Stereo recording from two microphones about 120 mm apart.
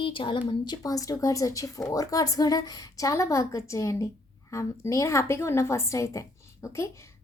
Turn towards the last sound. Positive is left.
turn(degrees=25)  # may be behind; listen again after turning